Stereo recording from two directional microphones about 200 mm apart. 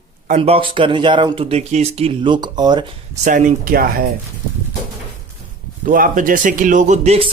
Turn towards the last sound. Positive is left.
turn(degrees=-30)  # may be behind; listen again after turning